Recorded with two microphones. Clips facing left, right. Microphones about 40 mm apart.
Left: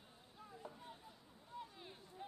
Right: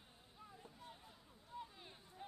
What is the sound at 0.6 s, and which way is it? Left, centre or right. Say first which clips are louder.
Boat: left 5 dB; centre.